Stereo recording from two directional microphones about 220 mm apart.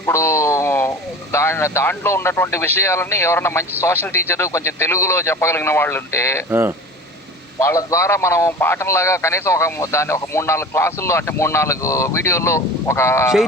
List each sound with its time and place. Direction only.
0.0 s a man's voice: 10° left (ahead or behind)
6.5 s speech: 10° right (ahead or behind)
7.6 s a man's voice: 15° left (ahead or behind)